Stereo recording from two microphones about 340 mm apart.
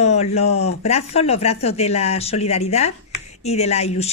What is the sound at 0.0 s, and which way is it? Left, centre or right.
Speech, centre.